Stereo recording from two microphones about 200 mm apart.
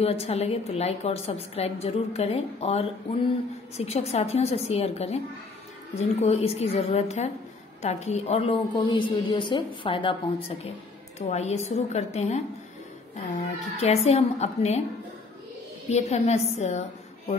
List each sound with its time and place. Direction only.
0.0 s a woman's voice: 30° left (ahead or behind)
11.1 s a woman's voice: 35° left (ahead or behind)
15.9 s a woman's voice: 35° left (ahead or behind)